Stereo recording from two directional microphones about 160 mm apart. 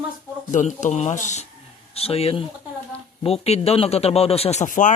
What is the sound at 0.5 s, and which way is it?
Speech, 50° left (ahead or behind).